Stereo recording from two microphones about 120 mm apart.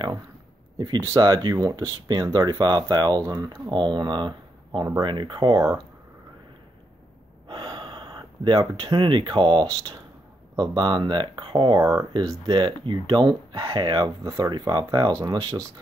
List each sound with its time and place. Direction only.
0.7 s speech: 40° right (ahead or behind)
1.0 s speech: 30° right (ahead or behind)
7.4 s speech: 40° right (ahead or behind)